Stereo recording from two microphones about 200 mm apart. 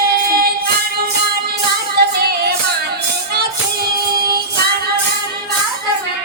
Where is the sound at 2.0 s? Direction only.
50° right (ahead or behind).